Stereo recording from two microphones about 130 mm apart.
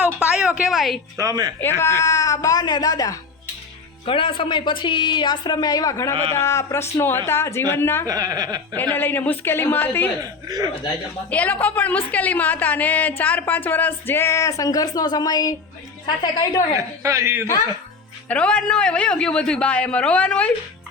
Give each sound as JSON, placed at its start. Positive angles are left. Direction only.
{"t": 0.3, "sound": "a sound", "side_deg": -10}
{"t": 0.6, "sound": "a woman's voice", "side_deg": 0}
{"t": 1.2, "sound": "a man's voice", "side_deg": -30}
{"t": 1.8, "sound": "speech", "side_deg": 20}
{"t": 4.0, "sound": "speech", "side_deg": 40}
{"t": 8.0, "sound": "a man's voice", "side_deg": -30}
{"t": 8.7, "sound": "a woman's voice", "side_deg": 15}
{"t": 10.2, "sound": "a man's voice", "side_deg": -30}
{"t": 11.3, "sound": "a woman's voice", "side_deg": 10}
{"t": 16.7, "sound": "a man's voice", "side_deg": -25}
{"t": 18.3, "sound": "a woman's voice", "side_deg": 10}